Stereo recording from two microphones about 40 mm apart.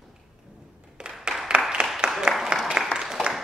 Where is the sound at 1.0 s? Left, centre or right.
Right.